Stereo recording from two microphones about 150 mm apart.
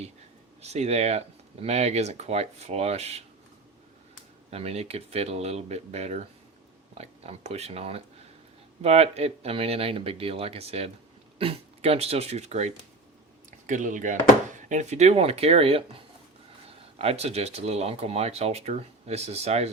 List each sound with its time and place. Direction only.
0.6 s speech: 45° right (ahead or behind)
4.5 s speech: 45° right (ahead or behind)
13.7 s speech: 60° right (ahead or behind)